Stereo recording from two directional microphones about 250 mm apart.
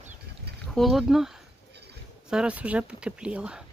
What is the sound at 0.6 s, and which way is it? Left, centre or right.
Speech, centre.